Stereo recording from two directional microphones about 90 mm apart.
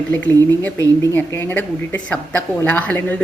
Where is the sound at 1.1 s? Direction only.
20° left (ahead or behind).